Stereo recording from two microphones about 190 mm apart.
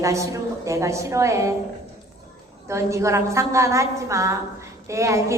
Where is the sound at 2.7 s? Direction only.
15° right (ahead or behind).